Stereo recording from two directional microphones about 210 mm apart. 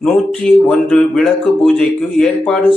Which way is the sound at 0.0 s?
Centre (ahead or behind).